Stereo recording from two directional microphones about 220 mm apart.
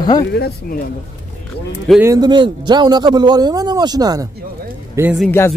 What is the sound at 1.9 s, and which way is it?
A man's voice, 10° right (ahead or behind).